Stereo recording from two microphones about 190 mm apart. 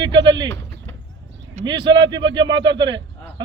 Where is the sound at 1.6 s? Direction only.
40° right (ahead or behind).